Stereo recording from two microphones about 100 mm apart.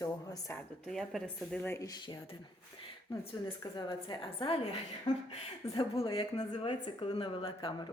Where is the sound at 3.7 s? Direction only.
50° left (ahead or behind).